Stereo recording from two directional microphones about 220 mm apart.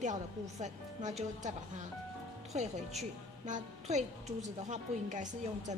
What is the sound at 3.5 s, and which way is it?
A woman's voice, 30° right (ahead or behind).